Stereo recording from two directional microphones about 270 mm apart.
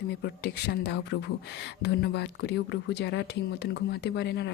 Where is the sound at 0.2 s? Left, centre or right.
Left.